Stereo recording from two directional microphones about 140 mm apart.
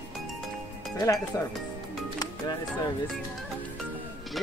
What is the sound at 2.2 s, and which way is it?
Speech, 30° left (ahead or behind).